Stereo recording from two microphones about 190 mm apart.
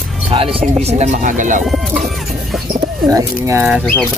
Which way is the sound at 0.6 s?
35° right (ahead or behind).